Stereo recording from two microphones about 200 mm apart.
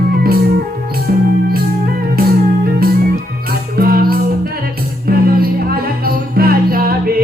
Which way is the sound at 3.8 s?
50° right (ahead or behind).